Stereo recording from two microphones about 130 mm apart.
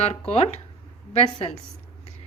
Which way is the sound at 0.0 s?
50° left (ahead or behind).